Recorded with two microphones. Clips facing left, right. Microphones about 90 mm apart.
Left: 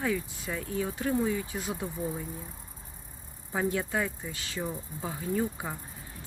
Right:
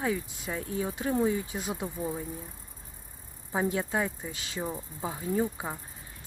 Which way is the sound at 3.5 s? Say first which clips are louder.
Right 1 dB; 20° right (ahead or behind).